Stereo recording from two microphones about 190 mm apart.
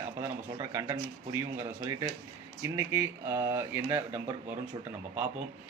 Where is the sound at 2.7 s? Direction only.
15° right (ahead or behind).